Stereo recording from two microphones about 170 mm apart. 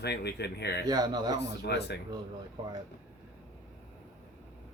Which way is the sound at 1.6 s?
75° left (ahead or behind).